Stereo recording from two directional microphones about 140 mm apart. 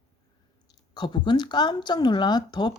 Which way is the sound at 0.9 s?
30° left (ahead or behind).